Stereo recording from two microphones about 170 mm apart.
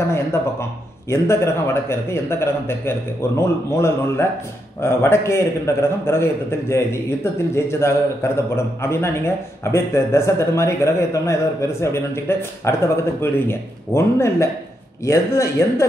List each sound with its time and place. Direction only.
0.1 s a man's voice: 15° left (ahead or behind)